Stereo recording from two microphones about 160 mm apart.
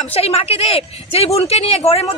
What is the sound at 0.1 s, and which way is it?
Speech, 40° left (ahead or behind).